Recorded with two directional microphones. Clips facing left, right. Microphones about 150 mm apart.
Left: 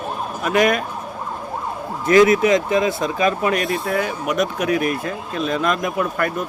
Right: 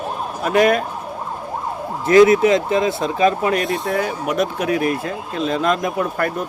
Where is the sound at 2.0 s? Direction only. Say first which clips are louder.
Right 2 dB; 30° right (ahead or behind).